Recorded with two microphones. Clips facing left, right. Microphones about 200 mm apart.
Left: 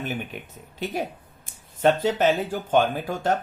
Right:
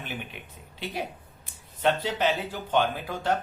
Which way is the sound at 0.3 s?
45° left (ahead or behind).